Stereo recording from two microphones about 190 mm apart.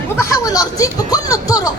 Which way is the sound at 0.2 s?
15° left (ahead or behind).